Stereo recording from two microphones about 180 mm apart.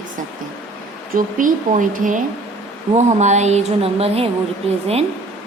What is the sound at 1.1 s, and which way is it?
A woman's voice, 50° right (ahead or behind).